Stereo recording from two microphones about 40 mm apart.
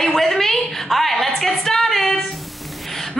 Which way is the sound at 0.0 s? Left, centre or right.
Centre.